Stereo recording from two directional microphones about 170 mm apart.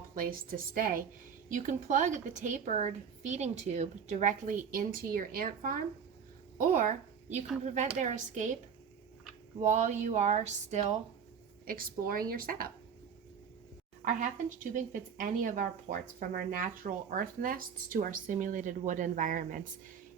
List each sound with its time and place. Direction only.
0.1 s a woman's voice: 55° right (ahead or behind)
9.6 s speech: 45° right (ahead or behind)
11.6 s a woman's voice: 55° right (ahead or behind)
14.0 s speech: 50° right (ahead or behind)